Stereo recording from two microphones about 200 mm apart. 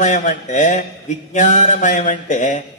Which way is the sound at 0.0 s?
40° left (ahead or behind).